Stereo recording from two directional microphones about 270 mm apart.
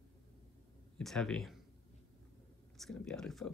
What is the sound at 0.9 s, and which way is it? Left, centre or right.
Speech, centre.